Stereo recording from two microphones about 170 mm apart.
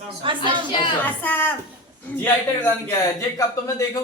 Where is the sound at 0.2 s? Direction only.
30° right (ahead or behind).